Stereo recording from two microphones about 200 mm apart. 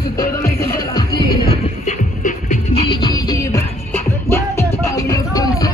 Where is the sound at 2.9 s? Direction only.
20° left (ahead or behind).